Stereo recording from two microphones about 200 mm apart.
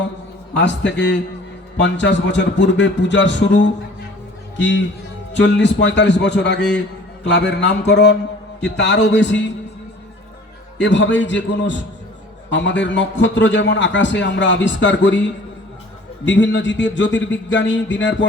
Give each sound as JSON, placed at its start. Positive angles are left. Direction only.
{"t": 0.5, "sound": "a man's voice", "side_deg": 60}
{"t": 10.8, "sound": "a man's voice", "side_deg": 65}